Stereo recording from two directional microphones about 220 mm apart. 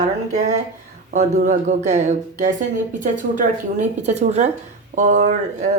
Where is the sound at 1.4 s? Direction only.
35° right (ahead or behind).